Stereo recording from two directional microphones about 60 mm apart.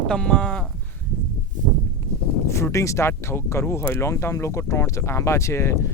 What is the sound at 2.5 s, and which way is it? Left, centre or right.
Speech, left.